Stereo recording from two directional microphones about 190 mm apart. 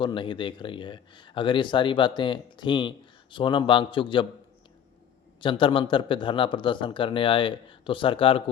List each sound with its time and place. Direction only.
0.0 s a man's voice: 25° left (ahead or behind)
5.4 s a man's voice: 25° left (ahead or behind)